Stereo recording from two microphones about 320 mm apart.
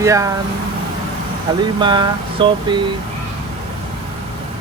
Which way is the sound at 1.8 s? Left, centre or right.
Centre.